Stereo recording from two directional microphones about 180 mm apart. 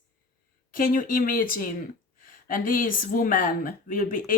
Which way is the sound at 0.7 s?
50° left (ahead or behind).